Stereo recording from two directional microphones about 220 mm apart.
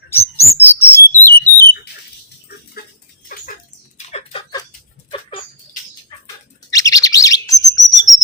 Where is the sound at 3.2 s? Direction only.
40° left (ahead or behind).